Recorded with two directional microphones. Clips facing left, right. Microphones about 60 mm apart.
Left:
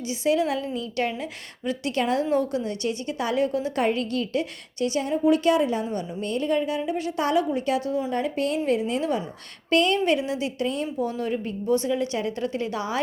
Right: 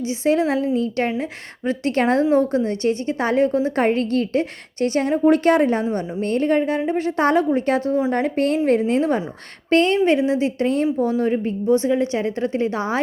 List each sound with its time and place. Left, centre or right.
0.1 s a woman's voice: right
0.6 s a woman's voice: right
1.2 s a woman's voice: right